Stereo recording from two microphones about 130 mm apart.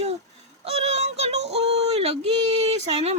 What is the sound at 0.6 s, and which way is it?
Child singing, 55° right (ahead or behind).